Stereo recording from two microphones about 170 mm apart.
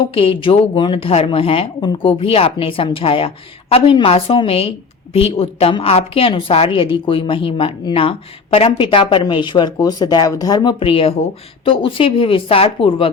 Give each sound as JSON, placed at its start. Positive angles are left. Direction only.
{"t": 0.1, "sound": "speech", "side_deg": 30}